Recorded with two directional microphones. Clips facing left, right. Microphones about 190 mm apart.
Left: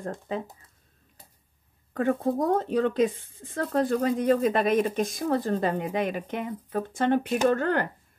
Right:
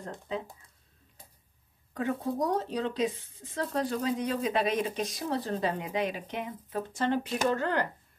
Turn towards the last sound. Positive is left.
turn(degrees=55)  # may be behind; listen again after turning